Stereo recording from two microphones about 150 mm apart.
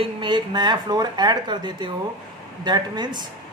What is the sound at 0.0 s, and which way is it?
A woman's voice, 30° right (ahead or behind).